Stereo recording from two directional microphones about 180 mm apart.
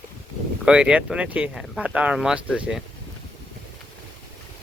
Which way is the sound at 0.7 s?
5° right (ahead or behind).